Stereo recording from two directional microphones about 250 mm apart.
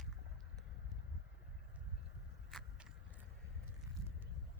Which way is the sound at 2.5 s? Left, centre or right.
Centre.